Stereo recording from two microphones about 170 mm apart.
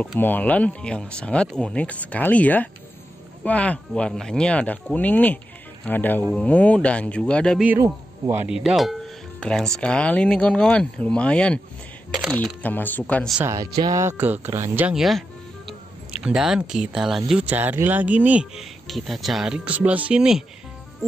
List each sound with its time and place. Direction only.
0.0 s speech: 10° left (ahead or behind)
7.6 s speech: 10° right (ahead or behind); by 11.6 s 5° left (ahead or behind)
12.1 s speech: 5° right (ahead or behind)
12.4 s speech: 10° left (ahead or behind)
13.4 s speech: 15° right (ahead or behind)